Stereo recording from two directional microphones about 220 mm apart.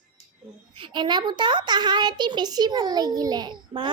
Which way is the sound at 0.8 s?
20° right (ahead or behind).